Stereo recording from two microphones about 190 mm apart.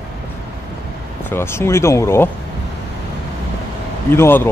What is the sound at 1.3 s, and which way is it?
Speech, 10° left (ahead or behind).